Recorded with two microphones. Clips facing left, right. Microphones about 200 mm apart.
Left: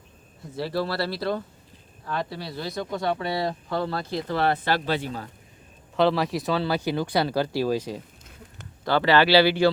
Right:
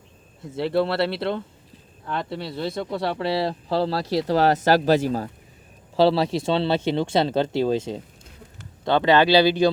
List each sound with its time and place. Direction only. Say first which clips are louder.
0.5 s speech: right 5 dB; 25° right (ahead or behind)
4.0 s speech: right 6 dB; 90° right
4.3 s speech: right 6 dB; 40° right (ahead or behind)
6.0 s speech: right 3 dB; 30° right (ahead or behind)